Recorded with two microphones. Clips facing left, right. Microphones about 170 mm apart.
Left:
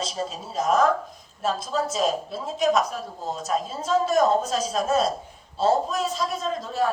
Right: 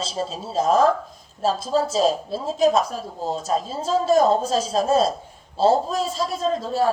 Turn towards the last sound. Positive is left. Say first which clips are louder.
# right 4 dB
turn(degrees=-30)  # may be behind; listen again after turning